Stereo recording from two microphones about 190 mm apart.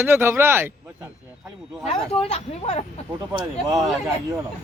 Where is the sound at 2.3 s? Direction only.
35° left (ahead or behind).